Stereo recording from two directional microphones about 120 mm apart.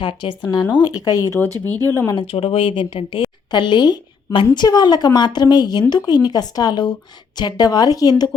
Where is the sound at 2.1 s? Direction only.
50° left (ahead or behind).